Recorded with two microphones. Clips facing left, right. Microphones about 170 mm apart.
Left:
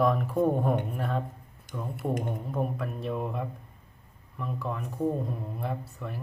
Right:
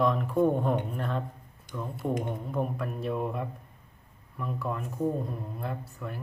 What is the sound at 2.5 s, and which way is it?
Speech, centre (ahead or behind).